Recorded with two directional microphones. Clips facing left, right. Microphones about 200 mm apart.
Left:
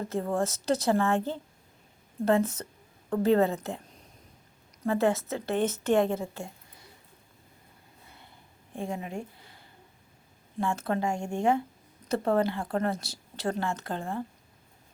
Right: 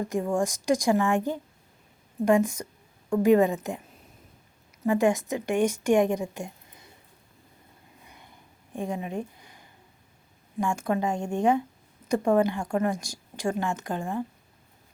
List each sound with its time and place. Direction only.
0.1 s a woman's voice: 15° right (ahead or behind)
4.8 s a woman's voice: 15° right (ahead or behind)
8.0 s a sound: 15° right (ahead or behind)
10.6 s a woman's voice: 15° right (ahead or behind)